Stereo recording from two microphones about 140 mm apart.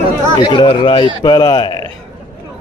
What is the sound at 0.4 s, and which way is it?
A man's voice, 35° left (ahead or behind).